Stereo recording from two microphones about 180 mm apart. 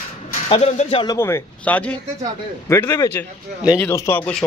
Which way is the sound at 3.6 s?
5° right (ahead or behind).